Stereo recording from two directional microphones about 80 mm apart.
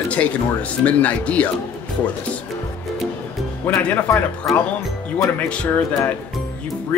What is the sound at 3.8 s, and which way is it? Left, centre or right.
Speech, left.